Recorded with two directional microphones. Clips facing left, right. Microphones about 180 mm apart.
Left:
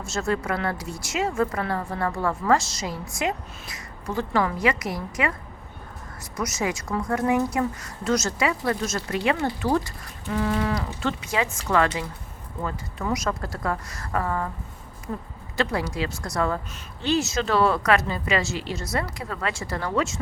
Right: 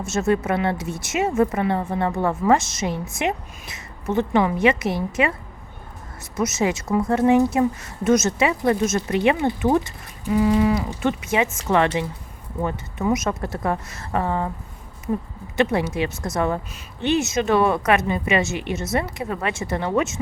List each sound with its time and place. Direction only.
0.0 s speech: 20° right (ahead or behind)
6.3 s speech: 25° right (ahead or behind)